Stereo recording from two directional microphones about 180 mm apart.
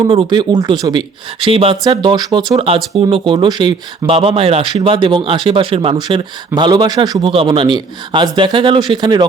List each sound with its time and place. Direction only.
0.1 s speech: 30° right (ahead or behind)